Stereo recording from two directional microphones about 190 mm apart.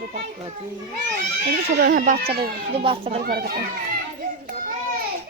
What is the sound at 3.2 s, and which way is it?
Speech, 50° right (ahead or behind).